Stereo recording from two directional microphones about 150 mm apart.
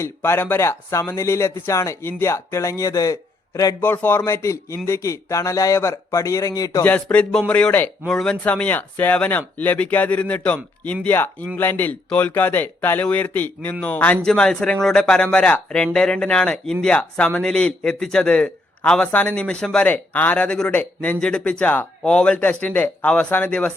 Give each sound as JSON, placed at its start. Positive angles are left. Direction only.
{"t": 0.0, "sound": "a man's voice", "side_deg": 15}
{"t": 6.8, "sound": "a man's voice", "side_deg": 10}